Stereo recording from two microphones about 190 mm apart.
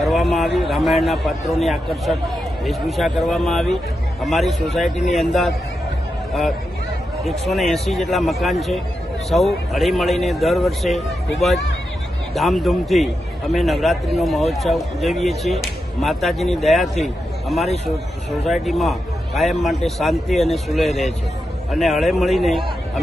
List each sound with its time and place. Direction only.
0.0 s a man's voice: centre (ahead or behind)
7.3 s a man's voice: centre (ahead or behind)